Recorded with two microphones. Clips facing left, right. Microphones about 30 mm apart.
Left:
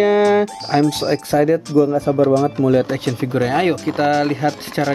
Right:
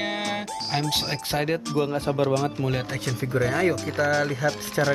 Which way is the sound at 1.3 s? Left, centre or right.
Right.